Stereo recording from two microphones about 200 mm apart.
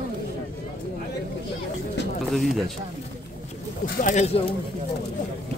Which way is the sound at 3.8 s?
40° left (ahead or behind).